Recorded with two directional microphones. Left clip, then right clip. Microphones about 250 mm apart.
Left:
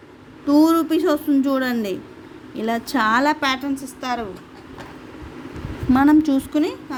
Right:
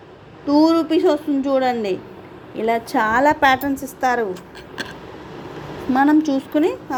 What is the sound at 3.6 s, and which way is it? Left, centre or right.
Speech, centre.